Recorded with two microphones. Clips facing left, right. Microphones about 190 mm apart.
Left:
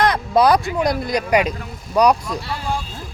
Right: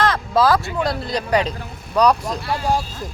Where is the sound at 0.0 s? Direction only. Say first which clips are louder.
Left 2 dB; 15° left (ahead or behind).